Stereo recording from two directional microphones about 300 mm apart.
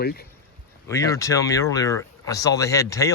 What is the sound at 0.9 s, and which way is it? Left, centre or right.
Speech, centre.